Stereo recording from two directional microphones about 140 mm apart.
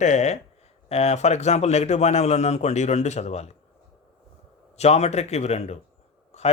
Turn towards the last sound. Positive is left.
turn(degrees=50)  # may be behind; listen again after turning